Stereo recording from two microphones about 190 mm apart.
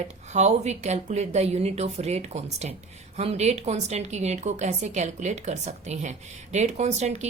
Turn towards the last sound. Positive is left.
turn(degrees=-35)  # may be behind; listen again after turning